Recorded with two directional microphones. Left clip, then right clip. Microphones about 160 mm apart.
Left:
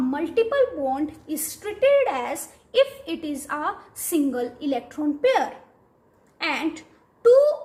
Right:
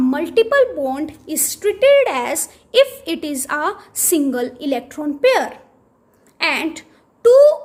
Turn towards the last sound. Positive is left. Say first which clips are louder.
# right 6 dB
turn(degrees=-70)  # may be behind; listen again after turning